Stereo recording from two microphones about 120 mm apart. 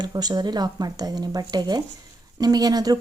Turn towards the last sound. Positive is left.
turn(degrees=-30)  # may be behind; listen again after turning